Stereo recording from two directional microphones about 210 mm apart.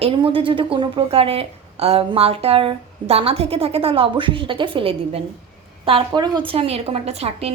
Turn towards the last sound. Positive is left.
turn(degrees=-30)  # may be behind; listen again after turning